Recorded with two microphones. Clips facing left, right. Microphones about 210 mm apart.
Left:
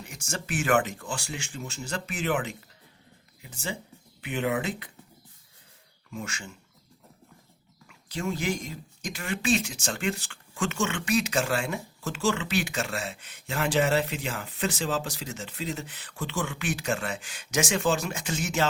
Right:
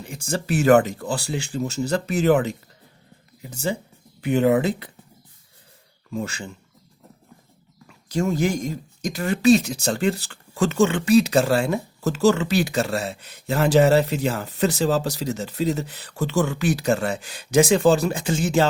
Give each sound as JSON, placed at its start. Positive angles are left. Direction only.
{"t": 0.0, "sound": "speech", "side_deg": -30}
{"t": 6.1, "sound": "speech", "side_deg": -35}
{"t": 7.9, "sound": "speech", "side_deg": -45}